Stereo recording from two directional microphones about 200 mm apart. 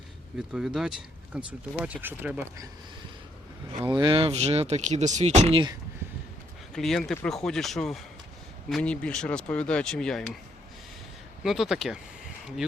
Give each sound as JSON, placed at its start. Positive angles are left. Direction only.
{"t": 0.5, "sound": "speech", "side_deg": -5}
{"t": 3.8, "sound": "speech", "side_deg": -20}
{"t": 6.7, "sound": "speech", "side_deg": 0}
{"t": 11.4, "sound": "speech", "side_deg": 0}